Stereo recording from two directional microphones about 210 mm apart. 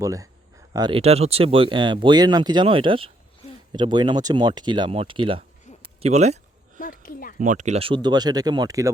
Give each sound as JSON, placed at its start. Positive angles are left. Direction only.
{"t": 0.0, "sound": "speech", "side_deg": -15}
{"t": 6.7, "sound": "a sound", "side_deg": 40}
{"t": 7.3, "sound": "speech", "side_deg": -35}